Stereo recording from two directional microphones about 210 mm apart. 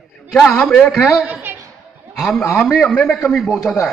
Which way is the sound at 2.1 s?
Centre (ahead or behind).